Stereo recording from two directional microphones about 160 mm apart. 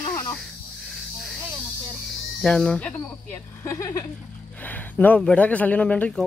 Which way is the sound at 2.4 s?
5° left (ahead or behind).